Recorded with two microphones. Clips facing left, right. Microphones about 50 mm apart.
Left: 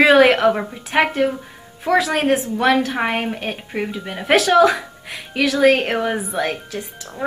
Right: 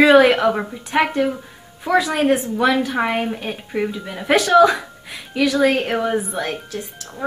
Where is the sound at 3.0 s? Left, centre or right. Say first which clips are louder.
Even; left.